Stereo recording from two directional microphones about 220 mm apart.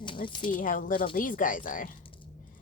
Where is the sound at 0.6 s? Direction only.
35° left (ahead or behind).